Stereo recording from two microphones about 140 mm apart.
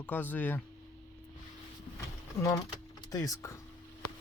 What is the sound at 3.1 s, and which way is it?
Speech, 25° left (ahead or behind).